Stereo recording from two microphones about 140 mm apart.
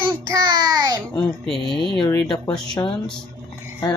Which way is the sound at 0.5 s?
30° right (ahead or behind).